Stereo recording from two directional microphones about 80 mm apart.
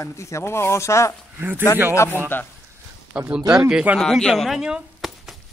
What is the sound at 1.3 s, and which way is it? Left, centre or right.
Speech, right.